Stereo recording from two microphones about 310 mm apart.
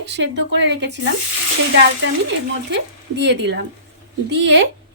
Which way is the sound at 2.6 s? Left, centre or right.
Right.